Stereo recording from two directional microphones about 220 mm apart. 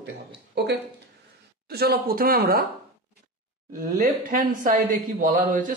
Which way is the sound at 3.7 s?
35° right (ahead or behind).